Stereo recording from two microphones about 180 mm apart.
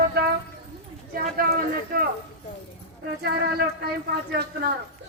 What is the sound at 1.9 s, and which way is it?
Speech, 55° right (ahead or behind).